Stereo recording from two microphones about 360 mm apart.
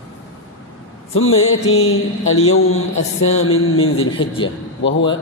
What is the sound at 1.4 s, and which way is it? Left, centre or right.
Mantra, left.